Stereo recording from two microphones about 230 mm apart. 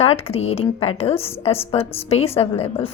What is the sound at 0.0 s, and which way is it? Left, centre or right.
Speech, left.